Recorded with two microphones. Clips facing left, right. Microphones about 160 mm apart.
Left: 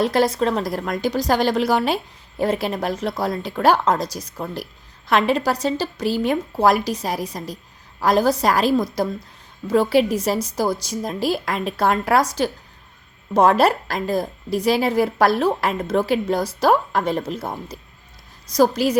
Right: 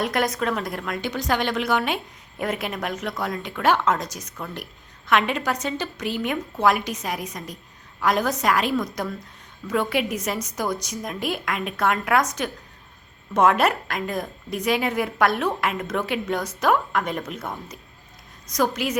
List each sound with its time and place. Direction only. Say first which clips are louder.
0.0 s a woman's voice: left 5 dB; 30° left (ahead or behind)